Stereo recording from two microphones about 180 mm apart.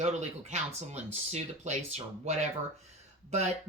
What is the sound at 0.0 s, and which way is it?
A woman's voice, 40° right (ahead or behind).